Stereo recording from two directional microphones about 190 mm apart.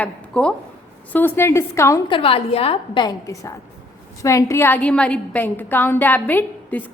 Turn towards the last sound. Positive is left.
turn(degrees=10)  # may be behind; listen again after turning